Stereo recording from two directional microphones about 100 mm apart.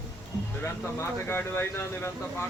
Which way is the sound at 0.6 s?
20° left (ahead or behind).